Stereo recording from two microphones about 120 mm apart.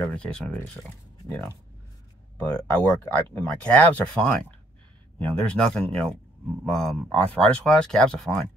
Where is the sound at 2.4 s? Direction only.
10° left (ahead or behind).